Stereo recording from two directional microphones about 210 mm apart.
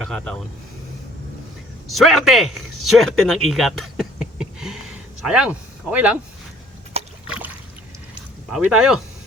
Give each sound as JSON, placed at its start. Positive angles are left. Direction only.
{"t": 1.9, "sound": "speech", "side_deg": 0}
{"t": 6.9, "sound": "rowboat", "side_deg": -30}
{"t": 8.4, "sound": "speech", "side_deg": 0}